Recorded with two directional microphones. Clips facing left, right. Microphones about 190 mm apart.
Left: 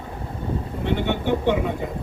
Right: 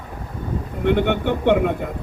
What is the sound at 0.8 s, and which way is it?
Speech, 55° right (ahead or behind).